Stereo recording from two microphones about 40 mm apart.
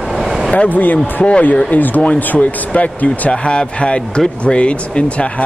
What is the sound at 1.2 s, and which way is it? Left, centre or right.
Speech, left.